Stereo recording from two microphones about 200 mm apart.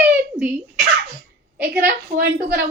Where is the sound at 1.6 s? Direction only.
55° right (ahead or behind).